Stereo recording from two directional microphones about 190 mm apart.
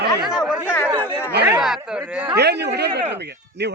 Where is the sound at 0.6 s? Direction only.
10° left (ahead or behind).